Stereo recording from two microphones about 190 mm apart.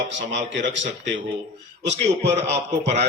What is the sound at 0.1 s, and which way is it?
A man's voice, 70° right (ahead or behind).